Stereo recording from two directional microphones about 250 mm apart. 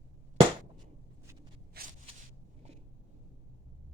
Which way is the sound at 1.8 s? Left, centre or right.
Right.